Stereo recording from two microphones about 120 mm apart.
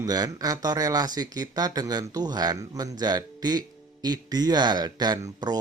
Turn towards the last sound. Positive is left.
turn(degrees=-30)  # may be behind; listen again after turning